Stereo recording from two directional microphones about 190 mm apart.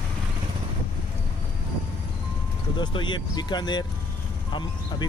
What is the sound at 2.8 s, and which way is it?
Speech, 25° left (ahead or behind).